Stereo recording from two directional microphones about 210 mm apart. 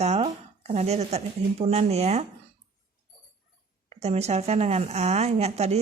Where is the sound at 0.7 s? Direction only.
30° right (ahead or behind).